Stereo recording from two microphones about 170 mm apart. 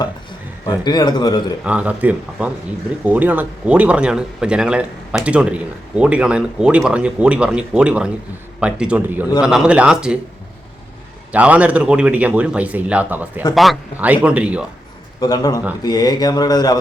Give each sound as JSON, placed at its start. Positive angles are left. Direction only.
{"t": 0.7, "sound": "speech", "side_deg": 25}
{"t": 1.6, "sound": "speech", "side_deg": -10}
{"t": 11.3, "sound": "speech", "side_deg": -10}
{"t": 13.5, "sound": "speech", "side_deg": 0}
{"t": 15.2, "sound": "speech", "side_deg": 20}